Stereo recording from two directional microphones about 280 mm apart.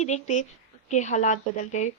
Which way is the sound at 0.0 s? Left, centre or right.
Left.